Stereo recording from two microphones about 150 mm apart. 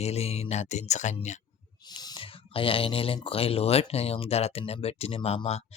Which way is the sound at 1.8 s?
25° left (ahead or behind).